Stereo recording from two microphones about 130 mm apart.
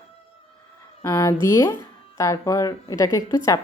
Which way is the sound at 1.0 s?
20° left (ahead or behind).